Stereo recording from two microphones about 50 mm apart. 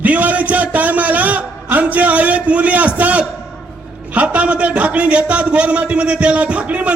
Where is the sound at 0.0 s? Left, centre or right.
Right.